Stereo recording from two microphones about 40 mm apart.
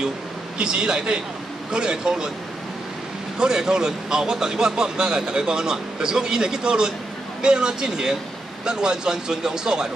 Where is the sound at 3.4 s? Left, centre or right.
Centre.